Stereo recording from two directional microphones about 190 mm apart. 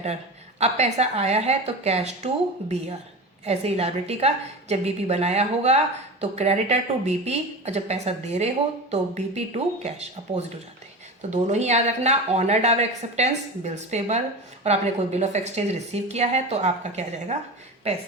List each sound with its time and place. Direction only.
0.6 s speech: 35° right (ahead or behind)